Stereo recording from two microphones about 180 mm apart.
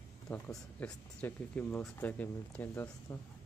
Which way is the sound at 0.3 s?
5° left (ahead or behind).